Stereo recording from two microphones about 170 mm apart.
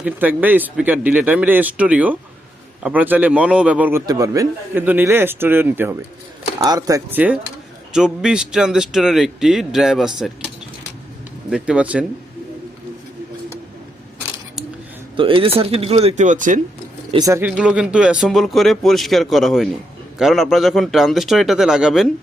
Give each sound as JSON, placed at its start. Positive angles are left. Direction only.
{"t": 0.0, "sound": "speech", "side_deg": -10}
{"t": 4.0, "sound": "speech", "side_deg": -20}
{"t": 7.9, "sound": "a man's voice", "side_deg": -5}
{"t": 11.5, "sound": "speech", "side_deg": -5}
{"t": 15.1, "sound": "speech", "side_deg": -30}
{"t": 17.2, "sound": "speech", "side_deg": -20}
{"t": 17.6, "sound": "a man's voice", "side_deg": -5}